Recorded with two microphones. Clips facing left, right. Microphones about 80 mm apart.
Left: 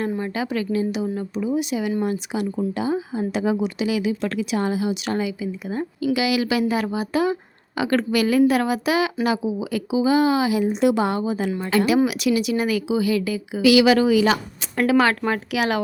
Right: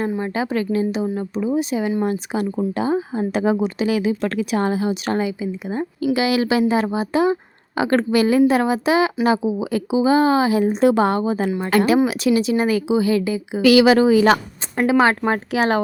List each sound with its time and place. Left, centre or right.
0.2 s speech: right
13.6 s speech: right
13.8 s speech: right
14.8 s speech: right
15.3 s speech: right